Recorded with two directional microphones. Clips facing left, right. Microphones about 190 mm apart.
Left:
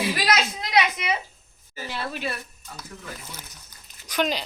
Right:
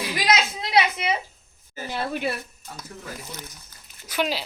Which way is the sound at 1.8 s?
50° right (ahead or behind).